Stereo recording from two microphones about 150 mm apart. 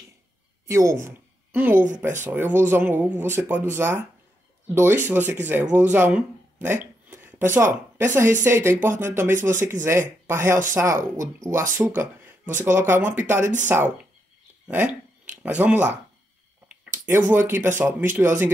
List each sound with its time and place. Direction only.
0.7 s speech: 20° right (ahead or behind)
17.0 s speech: 10° right (ahead or behind)